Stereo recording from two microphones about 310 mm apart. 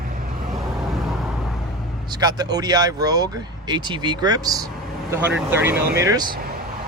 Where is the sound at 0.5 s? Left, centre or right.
Centre.